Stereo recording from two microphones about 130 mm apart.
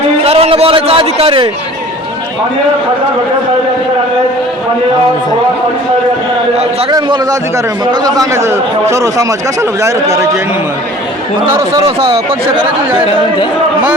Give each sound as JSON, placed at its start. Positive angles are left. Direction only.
{"t": 0.3, "sound": "a sound", "side_deg": -50}
{"t": 6.9, "sound": "a man's voice", "side_deg": -30}
{"t": 11.9, "sound": "speech", "side_deg": -45}